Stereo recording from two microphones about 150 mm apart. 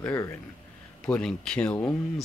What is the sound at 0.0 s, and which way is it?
Speech, 20° left (ahead or behind).